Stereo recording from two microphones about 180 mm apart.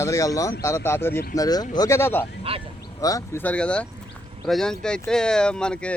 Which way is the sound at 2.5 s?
30° right (ahead or behind).